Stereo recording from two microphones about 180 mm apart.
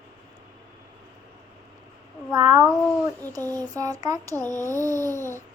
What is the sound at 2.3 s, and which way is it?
Speech, 20° right (ahead or behind).